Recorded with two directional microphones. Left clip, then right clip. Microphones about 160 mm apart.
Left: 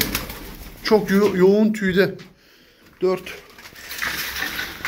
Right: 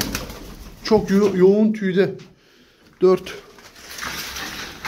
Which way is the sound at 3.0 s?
60° right (ahead or behind).